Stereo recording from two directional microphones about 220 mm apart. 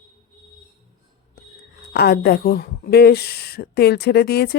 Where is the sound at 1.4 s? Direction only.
45° left (ahead or behind).